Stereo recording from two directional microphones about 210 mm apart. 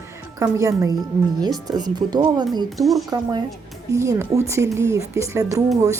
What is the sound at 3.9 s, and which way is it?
A woman's voice, 15° right (ahead or behind).